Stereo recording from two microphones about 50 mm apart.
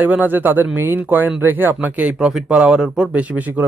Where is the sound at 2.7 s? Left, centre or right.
Centre.